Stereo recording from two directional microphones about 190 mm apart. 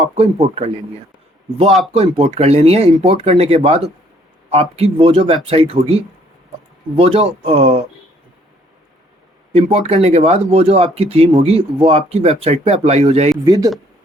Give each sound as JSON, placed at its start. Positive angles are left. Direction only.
{"t": 0.2, "sound": "speech", "side_deg": -30}
{"t": 1.9, "sound": "speech", "side_deg": -30}
{"t": 9.5, "sound": "speech", "side_deg": -30}
{"t": 13.4, "sound": "speech", "side_deg": -20}